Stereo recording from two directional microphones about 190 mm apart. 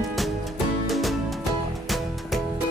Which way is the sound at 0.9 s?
Centre (ahead or behind).